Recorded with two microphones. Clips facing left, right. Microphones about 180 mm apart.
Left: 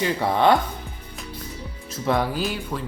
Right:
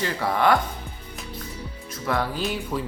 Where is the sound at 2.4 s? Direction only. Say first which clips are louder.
Even; centre (ahead or behind).